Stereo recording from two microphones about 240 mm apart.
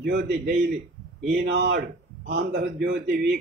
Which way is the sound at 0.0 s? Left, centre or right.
Right.